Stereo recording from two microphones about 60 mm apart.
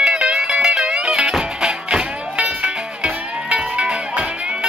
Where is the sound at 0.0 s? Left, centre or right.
Centre.